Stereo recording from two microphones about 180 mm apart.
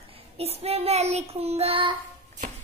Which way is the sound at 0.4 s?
35° right (ahead or behind).